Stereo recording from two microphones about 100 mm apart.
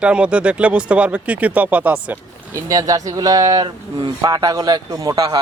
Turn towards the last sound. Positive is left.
turn(degrees=-45)  # may be behind; listen again after turning